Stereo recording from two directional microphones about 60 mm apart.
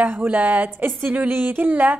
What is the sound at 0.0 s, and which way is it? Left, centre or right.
A woman's voice, right.